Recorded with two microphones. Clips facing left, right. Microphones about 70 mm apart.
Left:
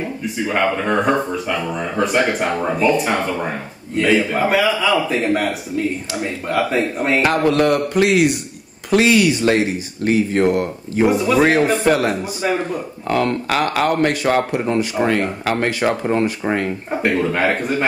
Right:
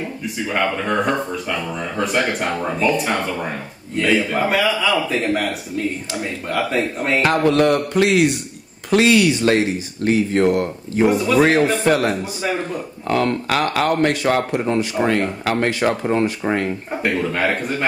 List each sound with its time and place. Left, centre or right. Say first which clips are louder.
0.0 s a man's voice: left 3 dB; centre
11.1 s a man's voice: even; centre